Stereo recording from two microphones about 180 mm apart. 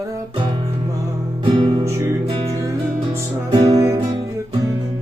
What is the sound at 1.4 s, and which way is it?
Music, 30° right (ahead or behind).